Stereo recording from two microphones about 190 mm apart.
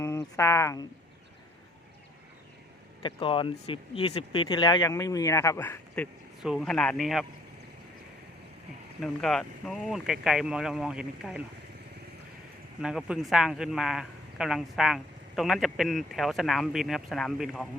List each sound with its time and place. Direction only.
0.0 s speech: 15° left (ahead or behind)
3.0 s speech: 25° left (ahead or behind)
6.4 s a man's voice: centre (ahead or behind)
9.0 s a man's voice: centre (ahead or behind)
12.8 s a man's voice: 5° right (ahead or behind)